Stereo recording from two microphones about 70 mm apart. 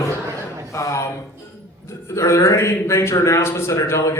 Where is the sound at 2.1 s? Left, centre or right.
Left.